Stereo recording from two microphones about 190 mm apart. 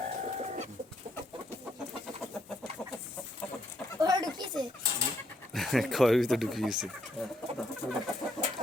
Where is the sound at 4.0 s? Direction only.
20° right (ahead or behind).